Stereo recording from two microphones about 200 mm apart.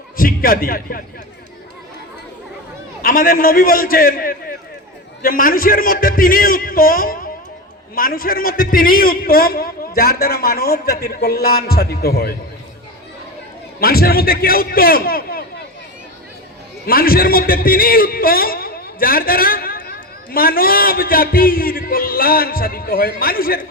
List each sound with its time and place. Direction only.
0.2 s a man's voice: 45° left (ahead or behind)
3.0 s a man's voice: 45° left (ahead or behind)
13.7 s a man's voice: 50° left (ahead or behind)
16.8 s a man's voice: 45° left (ahead or behind)